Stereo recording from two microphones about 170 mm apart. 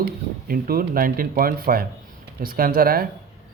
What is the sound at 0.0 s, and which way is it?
A man's voice, 60° right (ahead or behind).